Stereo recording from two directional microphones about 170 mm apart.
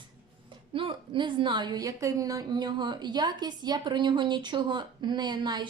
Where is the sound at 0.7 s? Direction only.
30° right (ahead or behind).